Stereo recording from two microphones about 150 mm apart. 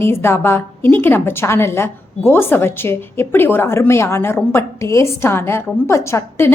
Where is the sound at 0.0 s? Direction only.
15° left (ahead or behind).